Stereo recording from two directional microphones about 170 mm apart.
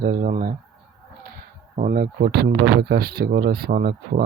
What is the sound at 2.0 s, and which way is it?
Speech, 75° right (ahead or behind).